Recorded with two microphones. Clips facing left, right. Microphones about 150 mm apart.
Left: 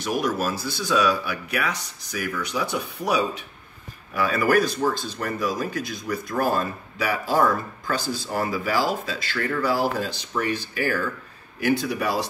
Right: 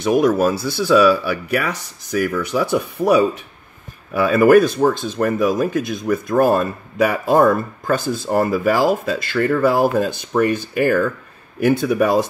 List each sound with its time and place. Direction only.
0.1 s speech: 50° right (ahead or behind)
4.2 s speech: 55° right (ahead or behind)